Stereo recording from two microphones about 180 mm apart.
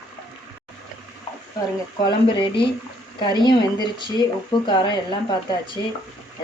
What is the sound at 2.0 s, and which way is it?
Speech, 25° left (ahead or behind).